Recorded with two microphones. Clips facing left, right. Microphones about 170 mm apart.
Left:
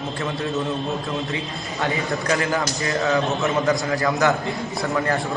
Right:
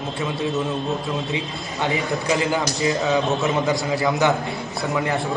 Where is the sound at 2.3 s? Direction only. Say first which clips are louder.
Right 1 dB; 20° right (ahead or behind).